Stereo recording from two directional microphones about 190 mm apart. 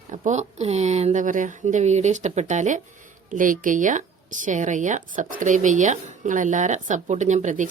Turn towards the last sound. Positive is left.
turn(degrees=-40)  # may be behind; listen again after turning